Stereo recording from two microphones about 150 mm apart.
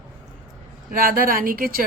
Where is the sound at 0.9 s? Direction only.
70° right (ahead or behind).